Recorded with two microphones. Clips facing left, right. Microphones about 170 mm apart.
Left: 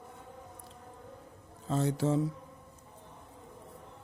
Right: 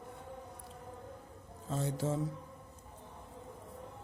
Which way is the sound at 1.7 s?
75° left (ahead or behind).